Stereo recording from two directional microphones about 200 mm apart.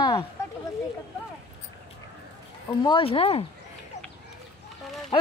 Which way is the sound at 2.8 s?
25° left (ahead or behind).